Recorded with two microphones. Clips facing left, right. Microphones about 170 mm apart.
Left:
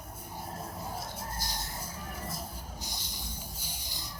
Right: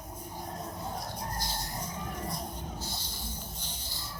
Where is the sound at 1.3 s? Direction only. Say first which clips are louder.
Right 2 dB; 20° right (ahead or behind).